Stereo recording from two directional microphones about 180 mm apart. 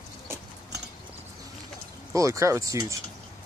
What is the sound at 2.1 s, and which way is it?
Speech, 15° right (ahead or behind).